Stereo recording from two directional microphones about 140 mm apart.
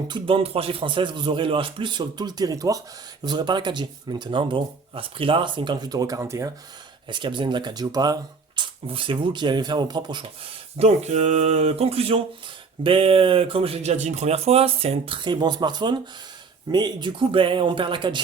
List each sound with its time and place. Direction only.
0.1 s speech: 40° right (ahead or behind); by 6.5 s 20° right (ahead or behind)
7.1 s speech: 35° right (ahead or behind)
10.8 s speech: 50° right (ahead or behind); by 18.2 s 35° right (ahead or behind)